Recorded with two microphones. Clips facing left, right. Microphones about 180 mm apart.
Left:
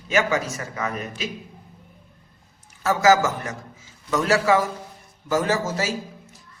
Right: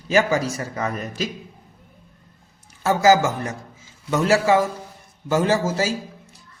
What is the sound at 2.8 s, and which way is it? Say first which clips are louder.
Speech: right 2 dB; 30° right (ahead or behind).